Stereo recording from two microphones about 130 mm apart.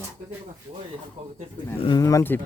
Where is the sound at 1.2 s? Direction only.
55° right (ahead or behind).